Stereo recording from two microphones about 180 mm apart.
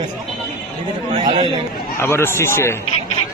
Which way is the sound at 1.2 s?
30° right (ahead or behind).